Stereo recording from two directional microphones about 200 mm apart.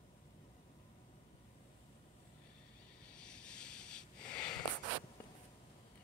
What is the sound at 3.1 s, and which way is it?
Sniff, 5° left (ahead or behind).